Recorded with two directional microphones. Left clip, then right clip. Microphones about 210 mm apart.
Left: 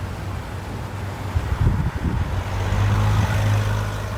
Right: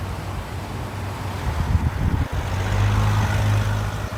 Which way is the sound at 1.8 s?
50° right (ahead or behind).